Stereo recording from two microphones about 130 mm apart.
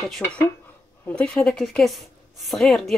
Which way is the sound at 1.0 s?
10° left (ahead or behind).